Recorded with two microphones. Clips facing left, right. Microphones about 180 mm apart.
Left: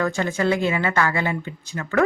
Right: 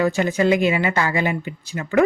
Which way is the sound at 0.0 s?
15° right (ahead or behind).